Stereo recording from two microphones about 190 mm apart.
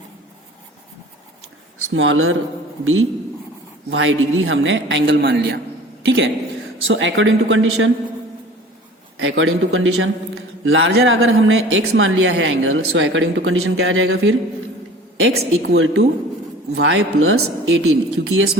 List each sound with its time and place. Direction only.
1.9 s a man's voice: 90° right; by 5.5 s 65° right (ahead or behind)
6.1 s a man's voice: 80° right
9.1 s a man's voice: 90° right